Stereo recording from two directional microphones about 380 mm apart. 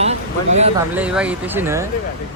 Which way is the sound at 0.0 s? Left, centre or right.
Centre.